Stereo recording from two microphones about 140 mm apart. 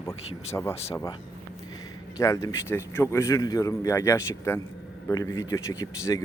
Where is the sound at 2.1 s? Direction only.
20° left (ahead or behind).